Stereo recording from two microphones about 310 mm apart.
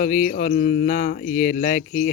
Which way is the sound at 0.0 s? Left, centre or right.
Left.